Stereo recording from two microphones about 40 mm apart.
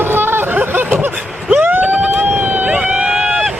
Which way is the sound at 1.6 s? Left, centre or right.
Right.